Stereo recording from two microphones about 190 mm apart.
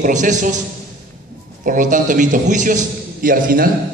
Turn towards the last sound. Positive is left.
turn(degrees=-50)  # may be behind; listen again after turning